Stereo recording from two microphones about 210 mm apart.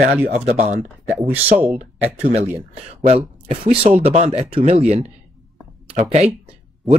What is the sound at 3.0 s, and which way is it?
Speech, 30° right (ahead or behind).